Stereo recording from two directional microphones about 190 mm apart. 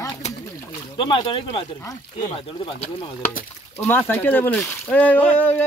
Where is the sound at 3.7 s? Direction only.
10° left (ahead or behind).